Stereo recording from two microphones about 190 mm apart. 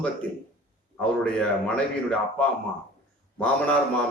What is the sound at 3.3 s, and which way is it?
Speech, 10° left (ahead or behind).